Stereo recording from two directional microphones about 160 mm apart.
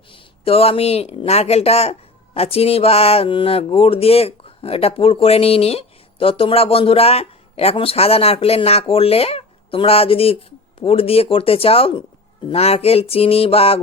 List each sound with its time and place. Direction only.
0.1 s speech: 35° left (ahead or behind)